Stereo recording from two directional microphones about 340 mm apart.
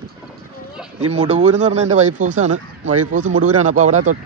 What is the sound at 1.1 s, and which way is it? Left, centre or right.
Speech, centre.